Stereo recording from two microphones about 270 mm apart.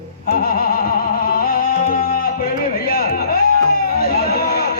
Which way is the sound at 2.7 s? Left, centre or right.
Left.